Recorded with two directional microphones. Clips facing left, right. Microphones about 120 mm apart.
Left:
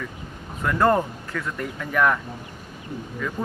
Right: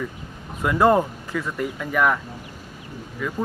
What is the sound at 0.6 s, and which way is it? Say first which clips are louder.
Speech: right 2 dB; 15° right (ahead or behind).